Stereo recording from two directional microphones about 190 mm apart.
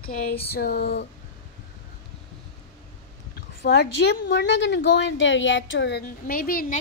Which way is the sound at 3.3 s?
60° left (ahead or behind).